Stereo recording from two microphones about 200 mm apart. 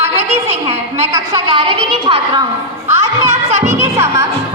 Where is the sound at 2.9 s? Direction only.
15° right (ahead or behind).